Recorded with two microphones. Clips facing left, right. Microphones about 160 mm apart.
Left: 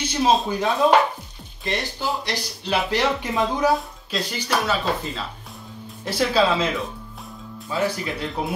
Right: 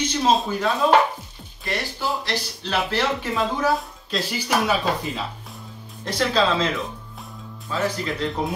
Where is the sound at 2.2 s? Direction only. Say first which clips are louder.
Even; 15° left (ahead or behind).